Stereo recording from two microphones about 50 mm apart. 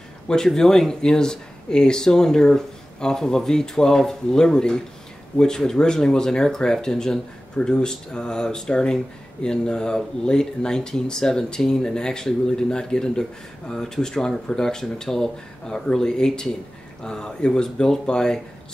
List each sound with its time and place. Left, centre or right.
0.3 s speech: centre